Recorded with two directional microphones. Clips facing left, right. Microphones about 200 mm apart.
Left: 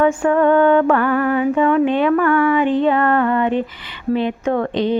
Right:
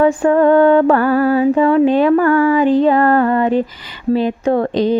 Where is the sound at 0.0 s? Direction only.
35° right (ahead or behind).